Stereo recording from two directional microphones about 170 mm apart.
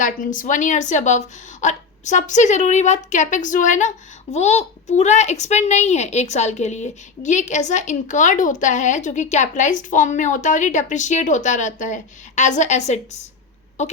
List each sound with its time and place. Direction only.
0.0 s a woman's voice: 50° left (ahead or behind)